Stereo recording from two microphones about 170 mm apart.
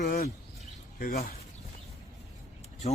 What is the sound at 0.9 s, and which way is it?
Speech, 55° left (ahead or behind).